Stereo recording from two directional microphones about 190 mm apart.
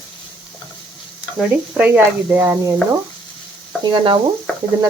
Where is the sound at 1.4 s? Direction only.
5° right (ahead or behind).